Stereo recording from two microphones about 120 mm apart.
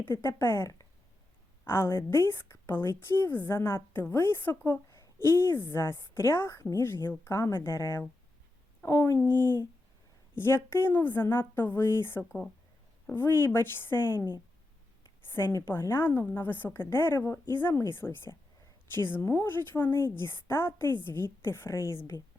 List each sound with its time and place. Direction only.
0.2 s a woman's voice: 20° left (ahead or behind)
15.3 s a woman's voice: 20° left (ahead or behind)